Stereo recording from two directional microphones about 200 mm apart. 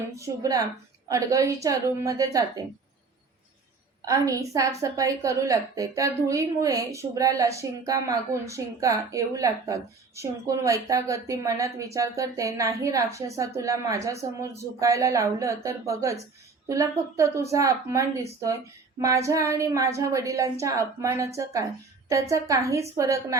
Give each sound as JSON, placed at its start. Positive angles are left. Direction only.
{"t": 0.2, "sound": "a woman's voice", "side_deg": -15}
{"t": 4.0, "sound": "a woman's voice", "side_deg": -15}